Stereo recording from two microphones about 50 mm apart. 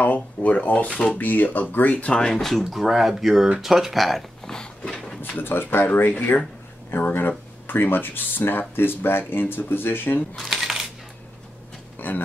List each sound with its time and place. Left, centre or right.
0.0 s drawer open or close: left
1.1 s speech: left
2.1 s speech: centre
2.6 s speech: centre
4.5 s a sound: centre
5.4 s speech: left
6.0 s speech: left
10.3 s coin: centre
12.0 s a sound: left